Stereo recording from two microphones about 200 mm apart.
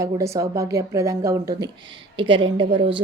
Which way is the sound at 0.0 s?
15° right (ahead or behind).